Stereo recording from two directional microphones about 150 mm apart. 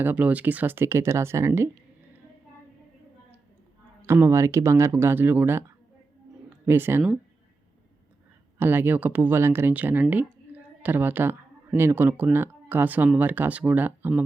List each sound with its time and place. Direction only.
0.0 s speech: 10° right (ahead or behind)
4.0 s speech: 15° right (ahead or behind)
6.7 s speech: 15° right (ahead or behind)
8.5 s speech: 15° right (ahead or behind)